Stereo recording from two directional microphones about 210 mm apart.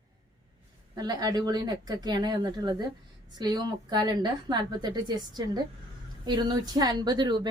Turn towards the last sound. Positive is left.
turn(degrees=-20)  # may be behind; listen again after turning